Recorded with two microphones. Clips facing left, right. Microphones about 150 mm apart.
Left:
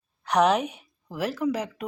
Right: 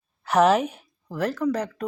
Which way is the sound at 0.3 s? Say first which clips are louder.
Right 3 dB; centre (ahead or behind).